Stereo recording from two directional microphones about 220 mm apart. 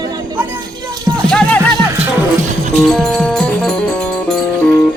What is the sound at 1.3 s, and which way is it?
Music, 5° left (ahead or behind).